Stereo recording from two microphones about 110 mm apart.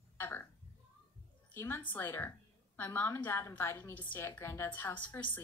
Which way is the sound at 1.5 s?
20° left (ahead or behind).